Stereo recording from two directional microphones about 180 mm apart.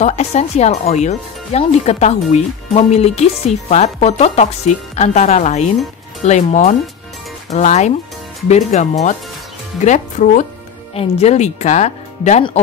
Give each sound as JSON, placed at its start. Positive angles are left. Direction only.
{"t": 0.0, "sound": "speech", "side_deg": 35}
{"t": 9.8, "sound": "speech", "side_deg": 45}